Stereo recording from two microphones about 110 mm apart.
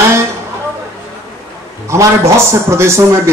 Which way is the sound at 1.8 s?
25° right (ahead or behind).